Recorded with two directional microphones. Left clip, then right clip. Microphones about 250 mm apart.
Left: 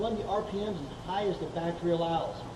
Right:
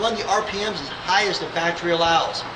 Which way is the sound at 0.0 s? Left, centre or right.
Right.